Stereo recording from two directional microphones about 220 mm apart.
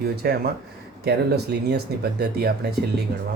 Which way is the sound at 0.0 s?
45° right (ahead or behind).